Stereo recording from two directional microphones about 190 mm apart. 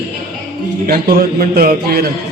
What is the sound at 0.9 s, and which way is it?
A man's voice, 50° right (ahead or behind).